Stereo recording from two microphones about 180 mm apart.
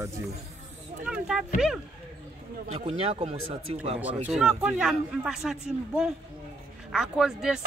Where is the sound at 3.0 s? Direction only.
35° right (ahead or behind).